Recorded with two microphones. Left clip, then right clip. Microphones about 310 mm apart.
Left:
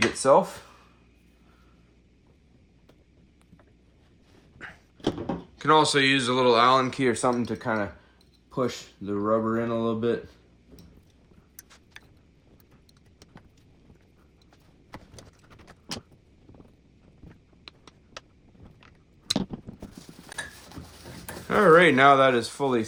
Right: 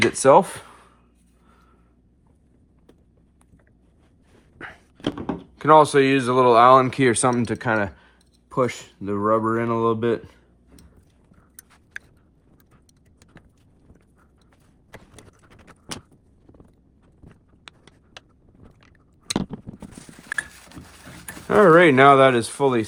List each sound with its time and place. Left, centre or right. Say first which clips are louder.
0.2 s speech: right 6 dB; right
4.5 s a sound: right 4 dB; right
5.5 s speech: right 6 dB; centre
21.4 s speech: right 4 dB; right